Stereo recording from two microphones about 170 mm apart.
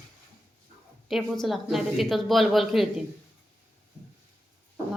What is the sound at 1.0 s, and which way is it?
Speech, centre (ahead or behind).